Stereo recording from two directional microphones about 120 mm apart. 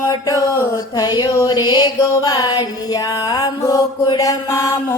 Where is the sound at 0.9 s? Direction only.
35° left (ahead or behind).